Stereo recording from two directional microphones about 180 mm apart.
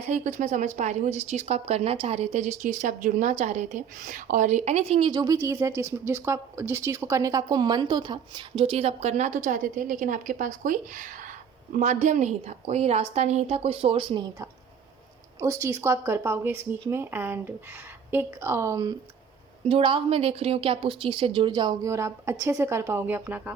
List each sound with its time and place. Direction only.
0.1 s a woman's voice: 40° right (ahead or behind)
15.4 s speech: 15° right (ahead or behind)
19.6 s a woman's voice: 30° right (ahead or behind); by 23.5 s 10° right (ahead or behind)